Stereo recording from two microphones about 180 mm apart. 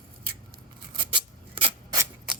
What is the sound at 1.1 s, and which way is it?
Rub, 30° right (ahead or behind).